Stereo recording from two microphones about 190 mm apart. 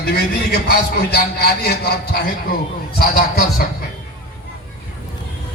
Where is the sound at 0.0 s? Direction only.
55° left (ahead or behind).